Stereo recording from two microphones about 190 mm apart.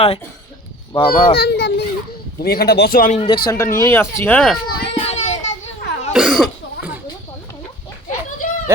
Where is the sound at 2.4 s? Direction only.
55° left (ahead or behind).